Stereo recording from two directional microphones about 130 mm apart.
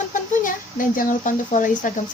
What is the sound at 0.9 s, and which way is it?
Speech, 90° left.